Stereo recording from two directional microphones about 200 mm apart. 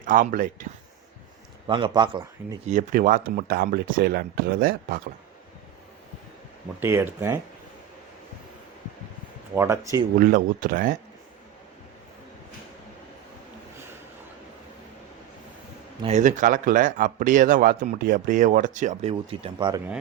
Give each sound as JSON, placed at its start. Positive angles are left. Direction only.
{"t": 0.0, "sound": "a man's voice", "side_deg": -40}
{"t": 1.6, "sound": "a man's voice", "side_deg": -25}
{"t": 2.6, "sound": "speech", "side_deg": -40}
{"t": 6.7, "sound": "speech", "side_deg": -10}
{"t": 9.6, "sound": "speech", "side_deg": -15}
{"t": 10.2, "sound": "speech", "side_deg": -45}
{"t": 16.0, "sound": "a man's voice", "side_deg": -35}